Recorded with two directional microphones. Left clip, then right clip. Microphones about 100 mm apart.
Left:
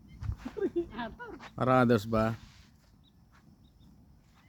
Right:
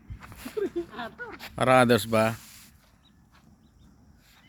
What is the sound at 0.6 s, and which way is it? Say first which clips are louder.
Speech: even; 10° right (ahead or behind).